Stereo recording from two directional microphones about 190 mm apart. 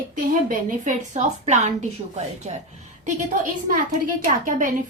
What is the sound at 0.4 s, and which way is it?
A woman's voice, 45° right (ahead or behind).